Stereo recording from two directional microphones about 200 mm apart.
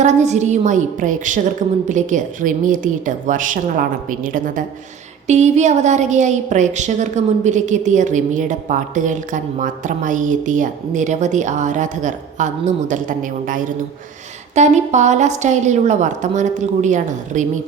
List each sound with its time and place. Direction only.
0.0 s a woman's voice: 35° right (ahead or behind)